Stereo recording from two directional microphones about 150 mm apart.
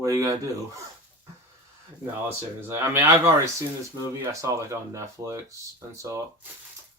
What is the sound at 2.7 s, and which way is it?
Speech, 20° right (ahead or behind).